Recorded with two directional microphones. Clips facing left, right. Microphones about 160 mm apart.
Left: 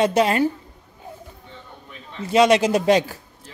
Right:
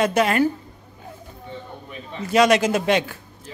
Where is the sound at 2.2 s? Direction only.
25° left (ahead or behind).